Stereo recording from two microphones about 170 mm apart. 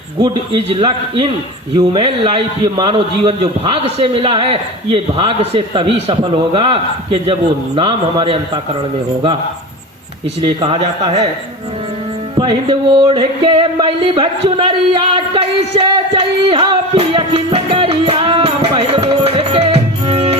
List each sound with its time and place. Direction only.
0.2 s a man's voice: 30° right (ahead or behind)
10.4 s a man's voice: 30° right (ahead or behind)
12.4 s music: 25° right (ahead or behind)